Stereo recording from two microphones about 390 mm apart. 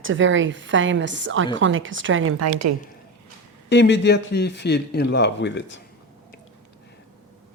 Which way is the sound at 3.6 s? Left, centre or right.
Left.